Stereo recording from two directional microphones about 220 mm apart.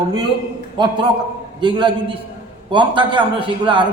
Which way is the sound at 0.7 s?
20° right (ahead or behind).